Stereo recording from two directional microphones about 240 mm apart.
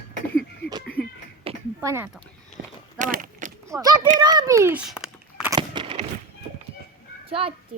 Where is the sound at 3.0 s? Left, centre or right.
Right.